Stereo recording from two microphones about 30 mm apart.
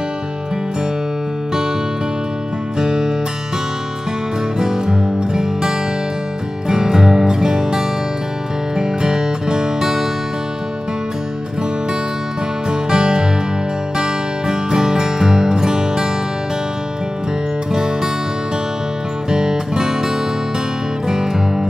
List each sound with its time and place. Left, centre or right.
2.8 s music: right
4.6 s music: centre
12.6 s music: right
17.7 s music: centre
19.2 s music: right